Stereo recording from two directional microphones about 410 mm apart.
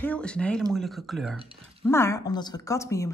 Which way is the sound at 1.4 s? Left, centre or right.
Centre.